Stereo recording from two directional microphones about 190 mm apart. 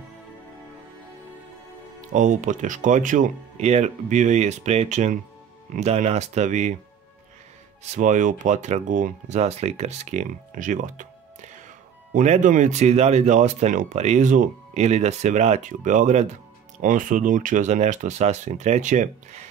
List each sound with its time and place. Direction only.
2.0 s speech: 40° right (ahead or behind)
7.9 s speech: 40° right (ahead or behind)
12.1 s speech: 45° right (ahead or behind)